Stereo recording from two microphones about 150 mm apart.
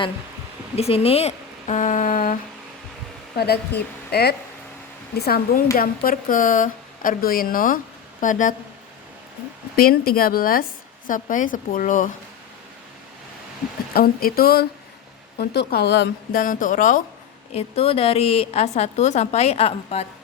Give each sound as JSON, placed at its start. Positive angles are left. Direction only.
{"t": 0.8, "sound": "speech", "side_deg": 40}
{"t": 3.3, "sound": "speech", "side_deg": 90}
{"t": 5.7, "sound": "a woman's voice", "side_deg": 75}
{"t": 9.7, "sound": "a woman's voice", "side_deg": 90}
{"t": 13.9, "sound": "speech", "side_deg": 80}
{"t": 16.3, "sound": "speech", "side_deg": 65}
{"t": 17.5, "sound": "a woman's voice", "side_deg": 45}